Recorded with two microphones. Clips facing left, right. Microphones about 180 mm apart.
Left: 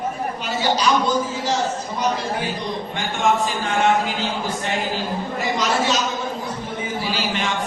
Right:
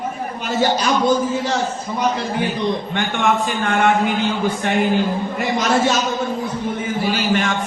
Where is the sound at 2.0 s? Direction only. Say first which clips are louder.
Right 3 dB; 60° right (ahead or behind).